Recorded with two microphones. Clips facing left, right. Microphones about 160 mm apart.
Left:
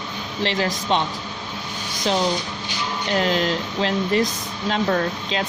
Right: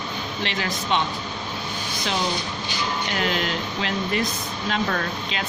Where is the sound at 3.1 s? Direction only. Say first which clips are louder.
Left 7 dB; 35° left (ahead or behind).